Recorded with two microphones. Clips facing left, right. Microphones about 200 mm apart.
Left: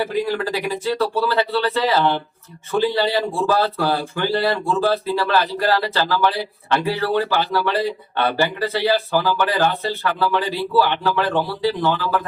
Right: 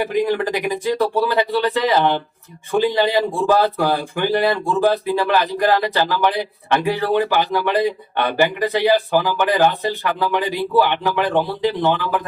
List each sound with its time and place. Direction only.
0.0 s a man's voice: 20° right (ahead or behind)